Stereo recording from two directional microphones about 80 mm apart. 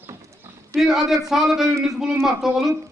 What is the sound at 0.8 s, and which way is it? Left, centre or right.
Speech, centre.